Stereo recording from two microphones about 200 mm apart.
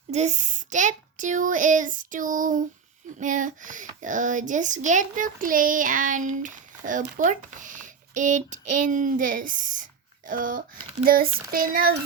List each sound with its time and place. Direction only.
0.1 s a child's voice: 35° right (ahead or behind)